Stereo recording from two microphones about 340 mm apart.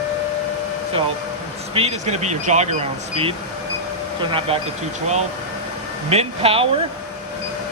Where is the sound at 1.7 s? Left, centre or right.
Centre.